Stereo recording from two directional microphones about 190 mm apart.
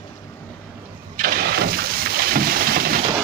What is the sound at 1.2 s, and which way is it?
Boat, 50° right (ahead or behind).